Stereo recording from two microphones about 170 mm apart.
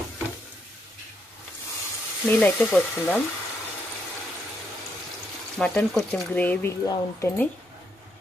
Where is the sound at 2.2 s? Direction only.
10° left (ahead or behind).